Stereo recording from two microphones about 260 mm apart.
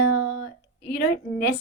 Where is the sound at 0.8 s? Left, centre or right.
Left.